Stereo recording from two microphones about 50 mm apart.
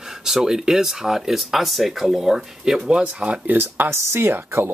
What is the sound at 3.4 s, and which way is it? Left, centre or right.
Speech, right.